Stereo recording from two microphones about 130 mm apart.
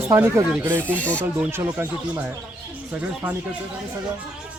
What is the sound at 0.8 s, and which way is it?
Speech, 10° left (ahead or behind).